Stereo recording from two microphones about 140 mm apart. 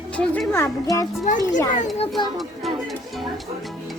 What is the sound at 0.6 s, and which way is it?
Speech, 20° left (ahead or behind).